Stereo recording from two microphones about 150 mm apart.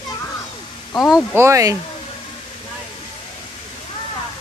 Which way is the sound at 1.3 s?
20° right (ahead or behind).